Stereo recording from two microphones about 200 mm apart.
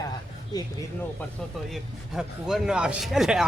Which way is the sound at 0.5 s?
20° left (ahead or behind).